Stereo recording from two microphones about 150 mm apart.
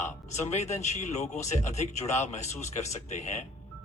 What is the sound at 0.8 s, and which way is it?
Speech, 50° left (ahead or behind).